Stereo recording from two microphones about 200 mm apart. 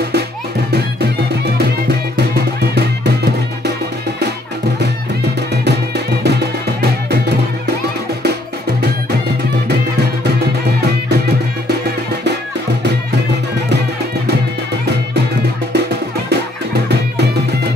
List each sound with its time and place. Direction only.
1.6 s music: 55° right (ahead or behind)
5.7 s music: 55° right (ahead or behind)